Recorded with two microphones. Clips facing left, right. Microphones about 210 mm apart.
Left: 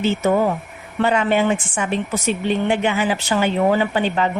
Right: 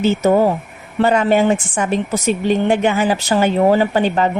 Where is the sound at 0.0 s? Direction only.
40° right (ahead or behind).